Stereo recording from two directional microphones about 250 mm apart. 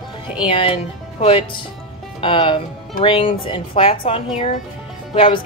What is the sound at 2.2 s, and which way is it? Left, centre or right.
Speech, centre.